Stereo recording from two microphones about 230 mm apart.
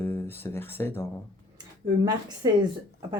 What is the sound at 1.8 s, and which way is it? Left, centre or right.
Speech, centre.